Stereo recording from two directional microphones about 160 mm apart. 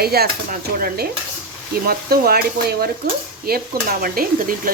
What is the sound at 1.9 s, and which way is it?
Speech, 70° right (ahead or behind).